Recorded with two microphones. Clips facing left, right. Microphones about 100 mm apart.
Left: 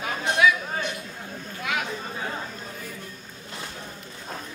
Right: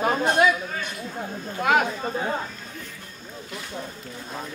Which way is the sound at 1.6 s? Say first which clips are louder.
Right 9 dB; 45° right (ahead or behind).